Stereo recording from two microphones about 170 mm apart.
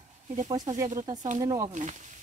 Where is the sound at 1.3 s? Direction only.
20° right (ahead or behind).